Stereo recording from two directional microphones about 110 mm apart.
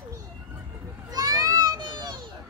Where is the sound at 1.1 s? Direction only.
35° right (ahead or behind).